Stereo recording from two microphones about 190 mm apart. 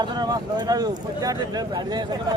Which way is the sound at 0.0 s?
20° right (ahead or behind).